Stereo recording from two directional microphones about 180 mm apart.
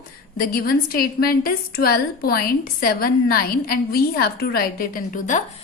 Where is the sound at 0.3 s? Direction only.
55° left (ahead or behind).